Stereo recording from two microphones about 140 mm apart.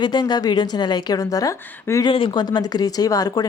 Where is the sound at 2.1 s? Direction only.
35° left (ahead or behind).